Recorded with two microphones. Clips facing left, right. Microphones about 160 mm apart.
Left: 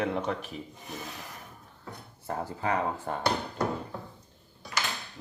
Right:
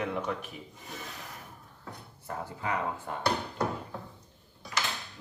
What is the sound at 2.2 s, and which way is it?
Speech, 35° left (ahead or behind).